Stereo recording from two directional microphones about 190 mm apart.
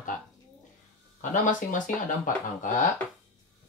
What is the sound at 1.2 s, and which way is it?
Speech, 40° left (ahead or behind).